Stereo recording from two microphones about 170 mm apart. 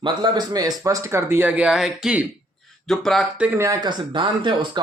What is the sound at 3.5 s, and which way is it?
Speech, 15° right (ahead or behind).